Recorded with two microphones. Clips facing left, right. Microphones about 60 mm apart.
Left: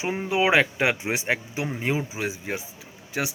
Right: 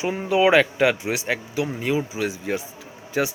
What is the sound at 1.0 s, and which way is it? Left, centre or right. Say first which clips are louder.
Speech: right 1 dB; left.